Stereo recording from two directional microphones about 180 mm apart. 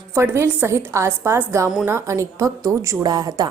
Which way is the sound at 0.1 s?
10° right (ahead or behind).